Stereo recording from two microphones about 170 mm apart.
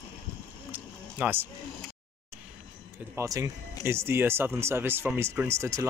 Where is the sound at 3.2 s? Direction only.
20° right (ahead or behind).